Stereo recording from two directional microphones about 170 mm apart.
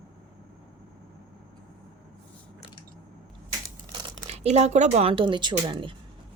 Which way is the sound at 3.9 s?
40° right (ahead or behind).